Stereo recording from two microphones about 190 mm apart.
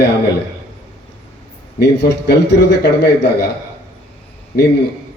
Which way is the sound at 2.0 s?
65° left (ahead or behind).